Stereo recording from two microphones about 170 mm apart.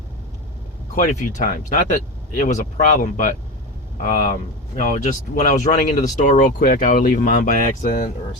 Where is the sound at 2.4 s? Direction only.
45° left (ahead or behind).